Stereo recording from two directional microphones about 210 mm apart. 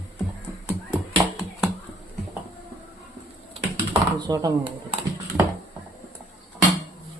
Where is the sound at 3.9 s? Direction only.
20° right (ahead or behind).